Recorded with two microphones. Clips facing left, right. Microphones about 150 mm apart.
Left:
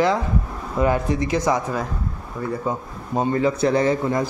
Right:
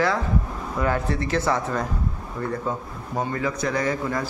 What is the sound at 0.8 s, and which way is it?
A man's voice, 15° left (ahead or behind).